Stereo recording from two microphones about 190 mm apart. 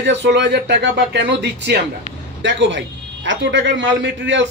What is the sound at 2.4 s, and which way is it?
A man's voice, 75° right (ahead or behind).